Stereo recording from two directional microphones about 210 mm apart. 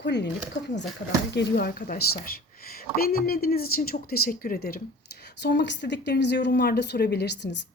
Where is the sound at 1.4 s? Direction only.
45° left (ahead or behind).